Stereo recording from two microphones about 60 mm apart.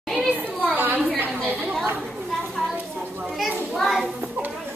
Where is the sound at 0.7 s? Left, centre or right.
Right.